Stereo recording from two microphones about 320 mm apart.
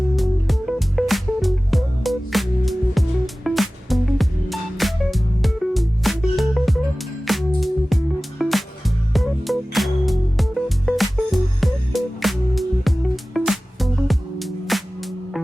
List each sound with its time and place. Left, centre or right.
0.2 s music: centre